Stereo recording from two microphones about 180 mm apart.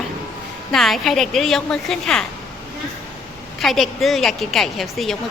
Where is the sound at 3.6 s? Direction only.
Centre (ahead or behind).